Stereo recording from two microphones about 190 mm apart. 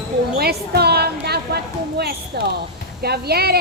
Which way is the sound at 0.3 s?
55° right (ahead or behind).